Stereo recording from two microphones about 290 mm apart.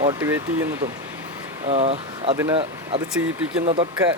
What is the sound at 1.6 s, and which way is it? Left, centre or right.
Speech, right.